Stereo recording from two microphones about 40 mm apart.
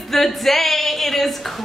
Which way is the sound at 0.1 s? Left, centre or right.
Centre.